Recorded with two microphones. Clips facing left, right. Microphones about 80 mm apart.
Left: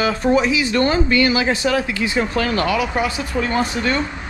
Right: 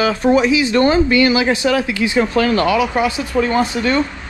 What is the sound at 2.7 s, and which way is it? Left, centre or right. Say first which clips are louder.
Speech: right 4 dB; right.